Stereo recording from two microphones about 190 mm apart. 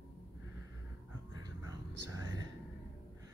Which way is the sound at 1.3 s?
20° right (ahead or behind).